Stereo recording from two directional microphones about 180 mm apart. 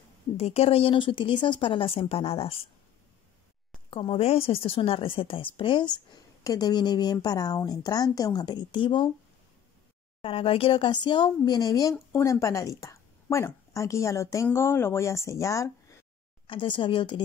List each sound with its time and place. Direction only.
0.4 s speech: 35° left (ahead or behind)
3.9 s speech: 30° left (ahead or behind)
10.2 s a woman's voice: 30° left (ahead or behind)
16.4 s speech: 30° left (ahead or behind)